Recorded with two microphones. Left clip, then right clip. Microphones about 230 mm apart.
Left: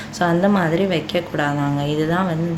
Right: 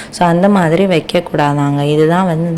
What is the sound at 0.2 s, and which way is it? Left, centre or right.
A woman's voice, right.